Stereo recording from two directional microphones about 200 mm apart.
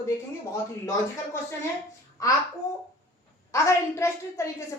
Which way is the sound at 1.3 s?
15° left (ahead or behind).